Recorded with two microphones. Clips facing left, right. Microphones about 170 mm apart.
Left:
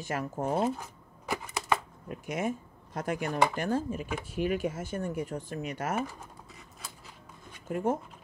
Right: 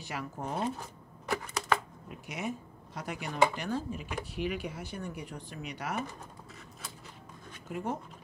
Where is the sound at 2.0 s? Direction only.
50° left (ahead or behind).